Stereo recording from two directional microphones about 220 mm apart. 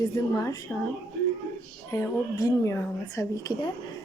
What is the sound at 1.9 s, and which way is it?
A woman's voice, 15° left (ahead or behind).